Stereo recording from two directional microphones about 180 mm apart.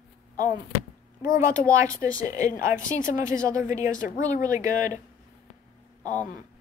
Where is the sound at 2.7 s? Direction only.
45° left (ahead or behind).